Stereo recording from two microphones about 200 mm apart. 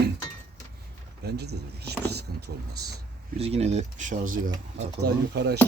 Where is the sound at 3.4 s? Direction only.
30° right (ahead or behind).